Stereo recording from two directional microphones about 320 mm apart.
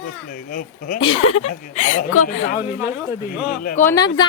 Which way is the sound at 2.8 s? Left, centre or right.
Centre.